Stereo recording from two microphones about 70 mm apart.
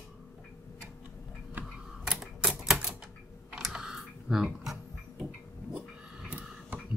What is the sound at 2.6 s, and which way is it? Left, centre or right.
Typewriter, centre.